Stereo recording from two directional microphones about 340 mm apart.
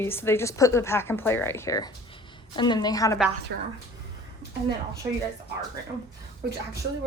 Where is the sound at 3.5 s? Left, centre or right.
Right.